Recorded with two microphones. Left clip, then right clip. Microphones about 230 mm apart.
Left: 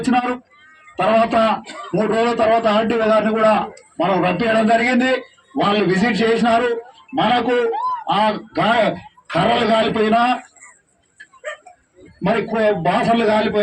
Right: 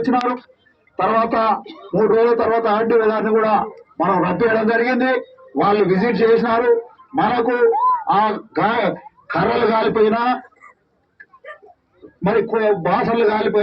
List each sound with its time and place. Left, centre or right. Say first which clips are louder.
0.9 s a man's voice: left 2 dB; left
12.2 s a man's voice: even; left